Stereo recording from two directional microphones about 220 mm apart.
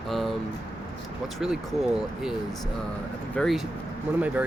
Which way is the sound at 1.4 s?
Centre (ahead or behind).